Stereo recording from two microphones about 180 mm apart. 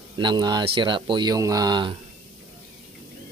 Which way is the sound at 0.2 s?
25° right (ahead or behind).